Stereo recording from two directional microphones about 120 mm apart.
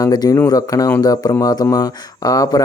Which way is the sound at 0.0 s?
30° left (ahead or behind).